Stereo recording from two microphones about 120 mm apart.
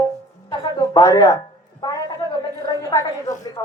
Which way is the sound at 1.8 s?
35° left (ahead or behind).